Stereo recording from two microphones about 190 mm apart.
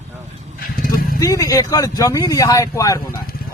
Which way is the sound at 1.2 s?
15° left (ahead or behind).